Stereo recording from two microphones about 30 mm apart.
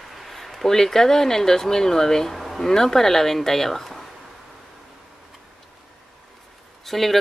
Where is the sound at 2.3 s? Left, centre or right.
Centre.